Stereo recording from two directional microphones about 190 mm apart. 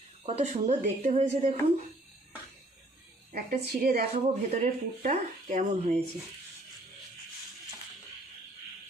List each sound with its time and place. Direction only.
0.3 s speech: 35° right (ahead or behind)
3.3 s a woman's voice: 55° right (ahead or behind)
4.1 s speech: 35° right (ahead or behind)